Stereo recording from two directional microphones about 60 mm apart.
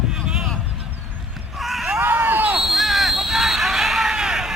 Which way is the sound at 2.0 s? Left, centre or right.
Right.